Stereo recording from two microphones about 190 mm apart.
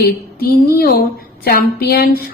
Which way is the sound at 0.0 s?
50° left (ahead or behind).